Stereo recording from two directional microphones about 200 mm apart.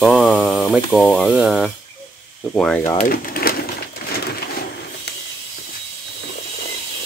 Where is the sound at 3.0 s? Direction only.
45° left (ahead or behind).